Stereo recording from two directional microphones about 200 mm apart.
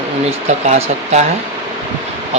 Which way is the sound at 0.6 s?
35° right (ahead or behind).